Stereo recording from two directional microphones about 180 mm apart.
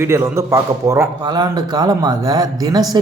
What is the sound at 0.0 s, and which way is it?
A man's voice, 15° right (ahead or behind).